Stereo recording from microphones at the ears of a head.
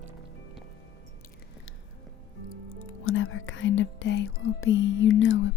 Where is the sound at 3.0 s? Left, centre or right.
Left.